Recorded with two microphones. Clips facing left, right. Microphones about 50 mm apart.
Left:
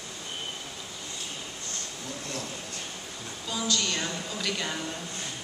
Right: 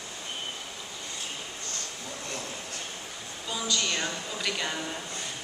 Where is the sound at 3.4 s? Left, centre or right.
Centre.